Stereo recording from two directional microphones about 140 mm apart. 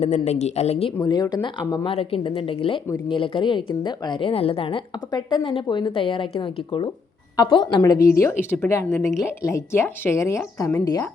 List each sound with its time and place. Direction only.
0.0 s speech: 55° left (ahead or behind)
1.0 s a woman's voice: 30° left (ahead or behind)
7.8 s speech: 20° left (ahead or behind)